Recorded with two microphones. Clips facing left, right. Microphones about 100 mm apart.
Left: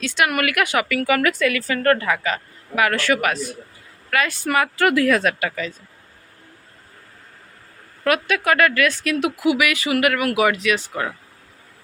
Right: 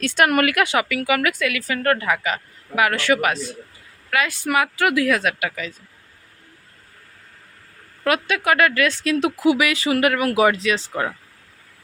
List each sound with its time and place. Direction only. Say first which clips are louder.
0.0 s a woman's voice: right 3 dB; 45° right (ahead or behind); by 5.7 s 5° right (ahead or behind)
8.0 s a woman's voice: left 1 dB; 20° right (ahead or behind)